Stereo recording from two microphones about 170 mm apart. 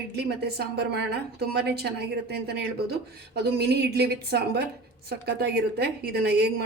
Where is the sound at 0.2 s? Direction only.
70° right (ahead or behind).